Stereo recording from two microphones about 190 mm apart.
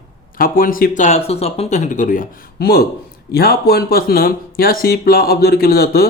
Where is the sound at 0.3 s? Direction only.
50° left (ahead or behind).